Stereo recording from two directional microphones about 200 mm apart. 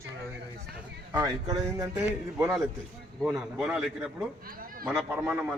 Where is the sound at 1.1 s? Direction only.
20° right (ahead or behind).